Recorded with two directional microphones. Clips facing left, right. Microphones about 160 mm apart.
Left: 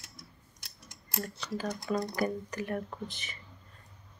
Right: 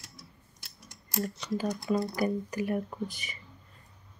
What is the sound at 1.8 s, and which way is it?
Speech, 5° right (ahead or behind).